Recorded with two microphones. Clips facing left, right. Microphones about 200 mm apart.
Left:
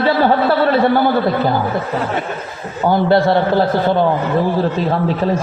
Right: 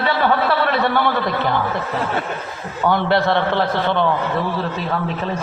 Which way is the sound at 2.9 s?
35° left (ahead or behind).